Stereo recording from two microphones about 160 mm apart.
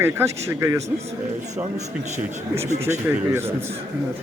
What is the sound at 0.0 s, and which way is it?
Speech, 15° right (ahead or behind).